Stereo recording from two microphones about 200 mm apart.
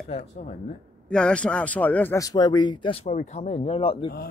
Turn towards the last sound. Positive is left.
turn(degrees=30)  # may be behind; listen again after turning